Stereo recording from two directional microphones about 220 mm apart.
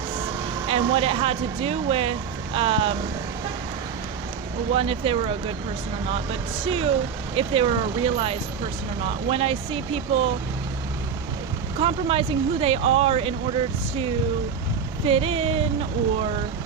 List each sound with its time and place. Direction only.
0.7 s speech: 25° right (ahead or behind)
4.7 s speech: 25° right (ahead or behind)
6.7 s speech: 25° right (ahead or behind)
11.8 s speech: 25° right (ahead or behind)
15.0 s speech: 25° right (ahead or behind)